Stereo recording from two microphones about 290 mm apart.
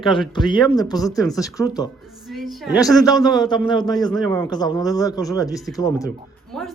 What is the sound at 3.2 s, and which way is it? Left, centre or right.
Speech, centre.